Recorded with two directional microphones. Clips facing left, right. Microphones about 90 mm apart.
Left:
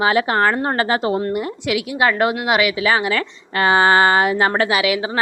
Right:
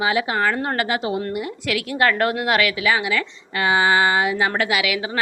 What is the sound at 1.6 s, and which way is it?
A woman's voice, 15° left (ahead or behind).